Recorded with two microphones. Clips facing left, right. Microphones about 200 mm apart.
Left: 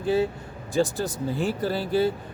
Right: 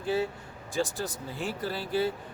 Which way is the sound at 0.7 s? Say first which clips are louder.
Left 7 dB; 30° left (ahead or behind).